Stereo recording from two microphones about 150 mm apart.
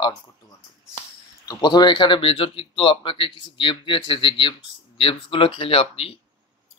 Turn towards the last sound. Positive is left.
turn(degrees=40)  # may be behind; listen again after turning